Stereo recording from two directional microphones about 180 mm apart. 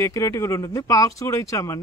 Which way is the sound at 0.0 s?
15° left (ahead or behind).